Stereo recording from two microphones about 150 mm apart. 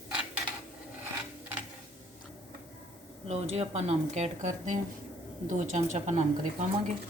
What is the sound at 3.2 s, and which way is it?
Speech, 45° right (ahead or behind).